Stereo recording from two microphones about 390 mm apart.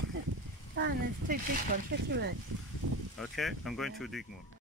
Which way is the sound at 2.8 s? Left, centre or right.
Right.